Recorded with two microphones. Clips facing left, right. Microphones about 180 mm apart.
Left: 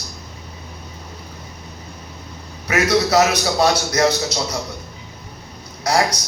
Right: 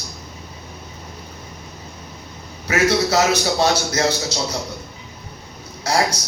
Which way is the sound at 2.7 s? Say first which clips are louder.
Left 1 dB; 30° right (ahead or behind).